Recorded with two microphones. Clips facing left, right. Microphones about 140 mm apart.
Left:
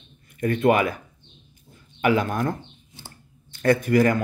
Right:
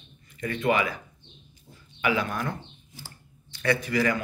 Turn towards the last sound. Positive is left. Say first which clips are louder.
# left 6 dB
turn(degrees=50)  # may be behind; listen again after turning